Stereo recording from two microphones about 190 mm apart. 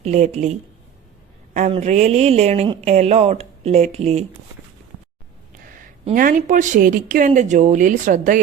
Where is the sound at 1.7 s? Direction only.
35° right (ahead or behind).